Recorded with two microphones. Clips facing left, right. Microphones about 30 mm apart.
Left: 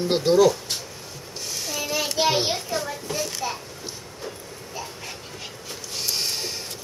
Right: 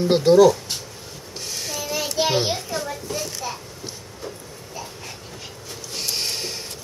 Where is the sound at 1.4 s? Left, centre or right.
Centre.